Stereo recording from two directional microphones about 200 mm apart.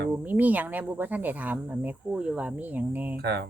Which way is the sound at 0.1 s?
10° right (ahead or behind).